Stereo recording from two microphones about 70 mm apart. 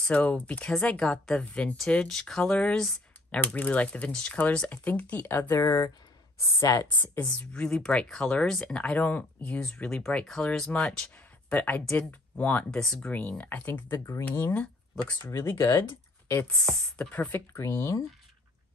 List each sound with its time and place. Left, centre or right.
0.1 s speech: centre
2.0 s speech: centre
3.3 s speech: centre
5.6 s speech: left
7.2 s speech: centre
12.7 s speech: centre
13.1 s speech: left
14.5 s speech: centre
15.2 s speech: left
16.5 s speech: centre
17.1 s speech: left
17.6 s speech: left